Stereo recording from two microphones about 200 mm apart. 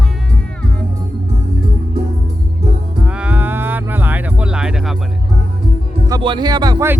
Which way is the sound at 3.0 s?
5° right (ahead or behind).